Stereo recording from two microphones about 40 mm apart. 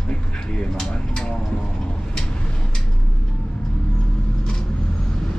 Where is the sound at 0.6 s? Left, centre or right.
Centre.